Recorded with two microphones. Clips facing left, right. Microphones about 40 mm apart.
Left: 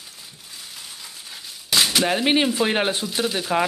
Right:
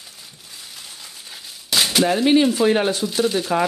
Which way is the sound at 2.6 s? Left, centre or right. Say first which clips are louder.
Right 4 dB; left.